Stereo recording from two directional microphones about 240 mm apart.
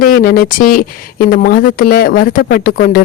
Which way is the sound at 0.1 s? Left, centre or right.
Left.